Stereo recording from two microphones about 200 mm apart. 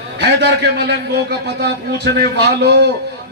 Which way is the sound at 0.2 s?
60° right (ahead or behind).